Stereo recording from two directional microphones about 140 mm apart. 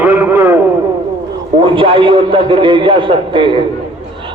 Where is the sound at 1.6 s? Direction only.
35° right (ahead or behind).